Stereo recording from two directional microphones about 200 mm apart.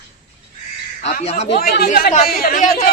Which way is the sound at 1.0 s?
30° left (ahead or behind).